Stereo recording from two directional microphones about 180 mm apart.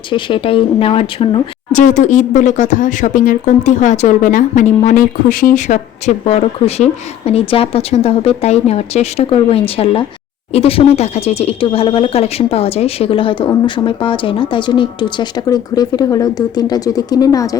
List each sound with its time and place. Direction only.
0.1 s speech: 30° left (ahead or behind)
1.7 s speech: 45° left (ahead or behind); by 17.6 s 20° left (ahead or behind)